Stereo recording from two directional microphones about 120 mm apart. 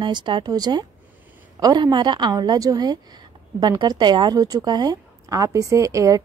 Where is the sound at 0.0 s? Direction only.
40° right (ahead or behind).